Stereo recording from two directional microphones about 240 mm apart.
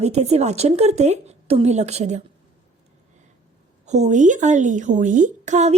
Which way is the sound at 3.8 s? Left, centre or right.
Right.